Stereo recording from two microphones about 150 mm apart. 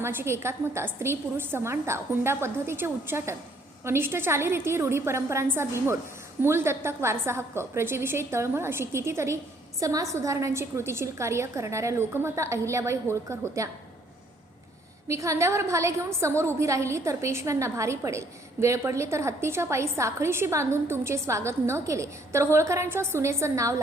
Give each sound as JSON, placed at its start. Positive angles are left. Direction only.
{"t": 0.0, "sound": "a woman's voice", "side_deg": -15}
{"t": 15.0, "sound": "a woman's voice", "side_deg": -20}